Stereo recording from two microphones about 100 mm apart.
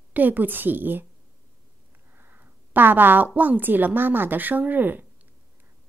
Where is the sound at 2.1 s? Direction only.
20° right (ahead or behind).